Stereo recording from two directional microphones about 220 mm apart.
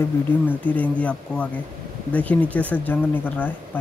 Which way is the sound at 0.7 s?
5° left (ahead or behind).